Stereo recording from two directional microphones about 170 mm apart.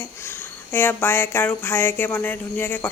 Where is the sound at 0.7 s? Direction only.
10° left (ahead or behind).